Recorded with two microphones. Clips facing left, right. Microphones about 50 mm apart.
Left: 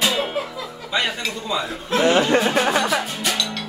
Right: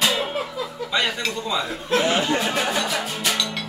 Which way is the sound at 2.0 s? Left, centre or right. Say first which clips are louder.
Left 8 dB; left.